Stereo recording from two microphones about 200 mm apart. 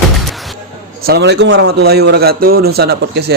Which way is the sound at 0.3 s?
Centre (ahead or behind).